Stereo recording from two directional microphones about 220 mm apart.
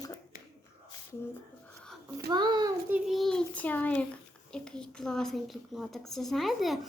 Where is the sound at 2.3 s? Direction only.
20° right (ahead or behind).